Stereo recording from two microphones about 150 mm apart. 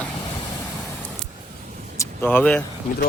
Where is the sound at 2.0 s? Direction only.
15° left (ahead or behind).